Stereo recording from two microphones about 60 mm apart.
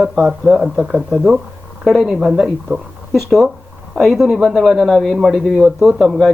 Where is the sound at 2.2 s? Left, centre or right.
Centre.